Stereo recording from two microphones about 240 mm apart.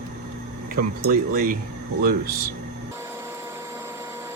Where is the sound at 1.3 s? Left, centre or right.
Right.